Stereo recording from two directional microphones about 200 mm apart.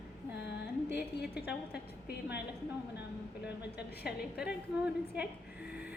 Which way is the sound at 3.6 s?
5° right (ahead or behind).